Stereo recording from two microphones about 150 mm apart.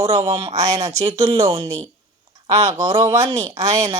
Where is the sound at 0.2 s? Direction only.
35° right (ahead or behind).